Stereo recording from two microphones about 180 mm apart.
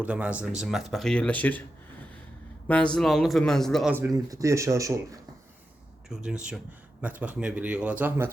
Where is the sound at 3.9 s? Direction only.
15° right (ahead or behind).